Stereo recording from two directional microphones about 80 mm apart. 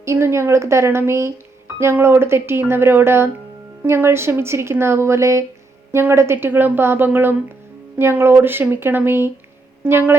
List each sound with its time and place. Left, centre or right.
0.0 s a woman's voice: right